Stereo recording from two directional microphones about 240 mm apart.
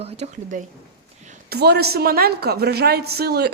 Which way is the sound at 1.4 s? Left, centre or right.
Right.